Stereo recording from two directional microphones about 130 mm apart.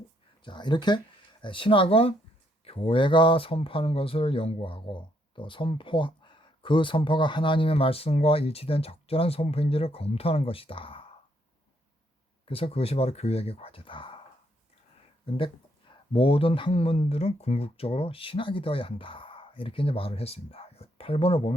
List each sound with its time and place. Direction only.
0.4 s speech: 35° left (ahead or behind)
12.5 s speech: 45° left (ahead or behind)
15.9 s speech: 45° left (ahead or behind)